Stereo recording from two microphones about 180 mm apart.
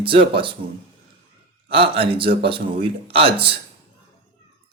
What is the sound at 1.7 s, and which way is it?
Speech, 30° right (ahead or behind).